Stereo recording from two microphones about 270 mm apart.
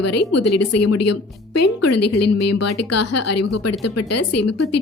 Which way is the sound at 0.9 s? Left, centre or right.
Left.